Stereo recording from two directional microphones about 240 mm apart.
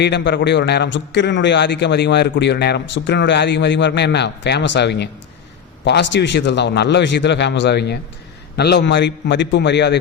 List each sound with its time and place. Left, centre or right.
0.0 s a man's voice: left